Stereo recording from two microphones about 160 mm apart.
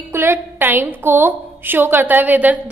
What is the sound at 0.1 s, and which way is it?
A woman's voice, 15° right (ahead or behind).